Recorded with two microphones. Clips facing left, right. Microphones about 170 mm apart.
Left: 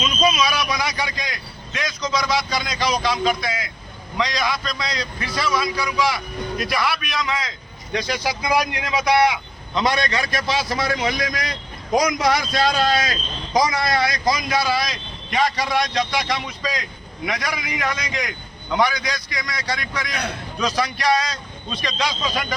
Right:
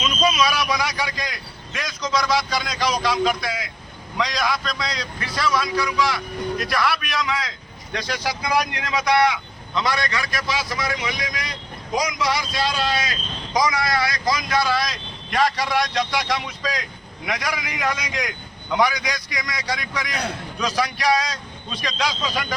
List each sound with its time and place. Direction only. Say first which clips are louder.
0.0 s a man's voice: left 1 dB; centre (ahead or behind)
20.6 s a man's voice: left 1 dB; 5° right (ahead or behind)